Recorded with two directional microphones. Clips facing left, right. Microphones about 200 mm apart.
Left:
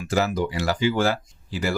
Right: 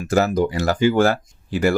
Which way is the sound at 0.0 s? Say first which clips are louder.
Right 5 dB; 45° right (ahead or behind).